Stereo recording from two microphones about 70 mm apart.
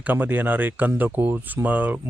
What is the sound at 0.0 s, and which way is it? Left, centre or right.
Speech, right.